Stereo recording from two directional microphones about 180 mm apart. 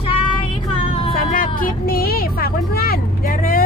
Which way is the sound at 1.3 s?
50° left (ahead or behind).